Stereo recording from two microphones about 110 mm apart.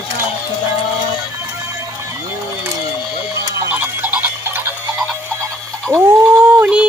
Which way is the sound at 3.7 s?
15° right (ahead or behind).